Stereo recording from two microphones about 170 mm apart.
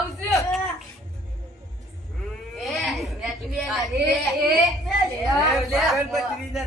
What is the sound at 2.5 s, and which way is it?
Speech, centre (ahead or behind).